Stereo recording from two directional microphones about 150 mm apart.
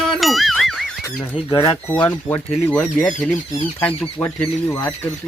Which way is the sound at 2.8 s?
5° left (ahead or behind).